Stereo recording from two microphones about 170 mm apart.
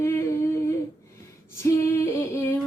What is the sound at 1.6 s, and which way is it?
Female singing, 15° left (ahead or behind).